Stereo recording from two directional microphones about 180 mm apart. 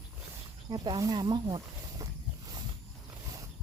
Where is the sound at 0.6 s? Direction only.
25° right (ahead or behind).